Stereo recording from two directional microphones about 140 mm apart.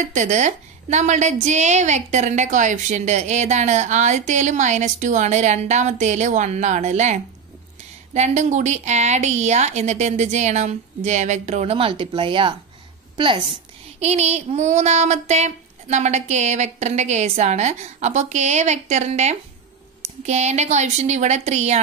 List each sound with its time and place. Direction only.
0.1 s a woman's voice: 60° right (ahead or behind)
8.1 s child singing: 55° right (ahead or behind); by 12.5 s 35° right (ahead or behind)
13.9 s child singing: 50° right (ahead or behind)